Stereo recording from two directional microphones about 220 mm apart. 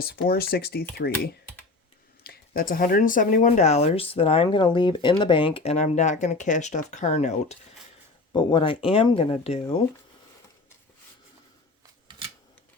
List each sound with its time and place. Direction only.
0.0 s speech: 45° left (ahead or behind)
2.2 s speech: 40° left (ahead or behind)
8.3 s speech: 20° left (ahead or behind)